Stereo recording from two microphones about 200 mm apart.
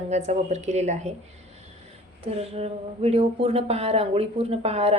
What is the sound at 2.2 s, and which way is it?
Speech, 30° right (ahead or behind).